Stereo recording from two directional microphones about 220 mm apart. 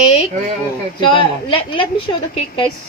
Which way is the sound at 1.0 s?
20° left (ahead or behind).